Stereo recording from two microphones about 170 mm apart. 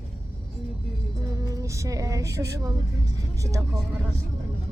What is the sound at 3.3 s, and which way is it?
Speech, 20° right (ahead or behind).